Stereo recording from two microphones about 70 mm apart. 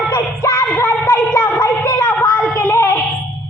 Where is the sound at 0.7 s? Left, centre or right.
Left.